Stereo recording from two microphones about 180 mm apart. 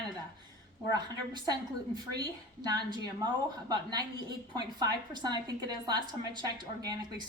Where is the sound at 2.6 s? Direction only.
25° right (ahead or behind).